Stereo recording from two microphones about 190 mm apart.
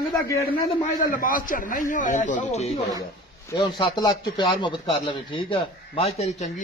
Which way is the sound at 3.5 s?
20° left (ahead or behind).